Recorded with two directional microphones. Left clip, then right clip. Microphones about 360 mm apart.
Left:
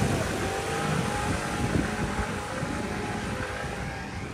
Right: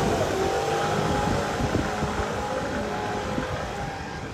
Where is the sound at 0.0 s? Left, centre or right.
Right.